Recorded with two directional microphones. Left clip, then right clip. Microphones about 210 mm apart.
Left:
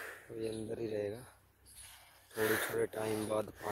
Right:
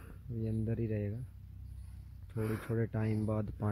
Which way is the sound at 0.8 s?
5° left (ahead or behind).